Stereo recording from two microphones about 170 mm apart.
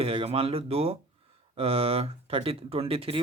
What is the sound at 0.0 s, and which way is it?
Speech, 35° right (ahead or behind).